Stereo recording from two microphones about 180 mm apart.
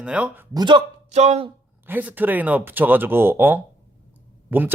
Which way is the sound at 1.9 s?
10° right (ahead or behind).